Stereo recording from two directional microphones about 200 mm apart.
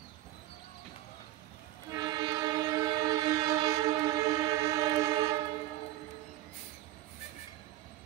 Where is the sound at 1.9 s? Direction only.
20° right (ahead or behind).